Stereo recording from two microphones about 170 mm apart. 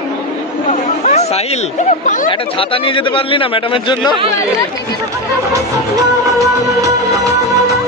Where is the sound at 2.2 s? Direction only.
30° left (ahead or behind).